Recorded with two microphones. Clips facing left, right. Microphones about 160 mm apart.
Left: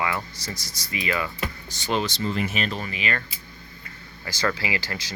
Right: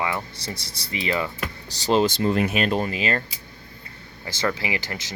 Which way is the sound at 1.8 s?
35° right (ahead or behind).